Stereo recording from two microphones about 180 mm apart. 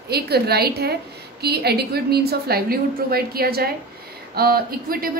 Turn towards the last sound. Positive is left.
turn(degrees=-55)  # may be behind; listen again after turning